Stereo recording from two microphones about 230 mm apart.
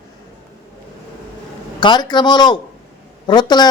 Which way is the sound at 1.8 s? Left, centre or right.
Centre.